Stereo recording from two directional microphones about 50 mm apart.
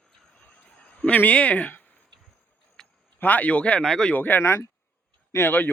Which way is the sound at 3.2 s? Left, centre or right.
Left.